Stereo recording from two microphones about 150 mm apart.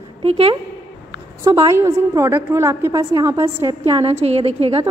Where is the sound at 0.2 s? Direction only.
40° right (ahead or behind).